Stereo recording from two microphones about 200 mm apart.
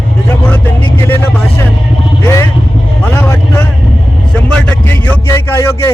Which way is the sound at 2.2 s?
15° left (ahead or behind).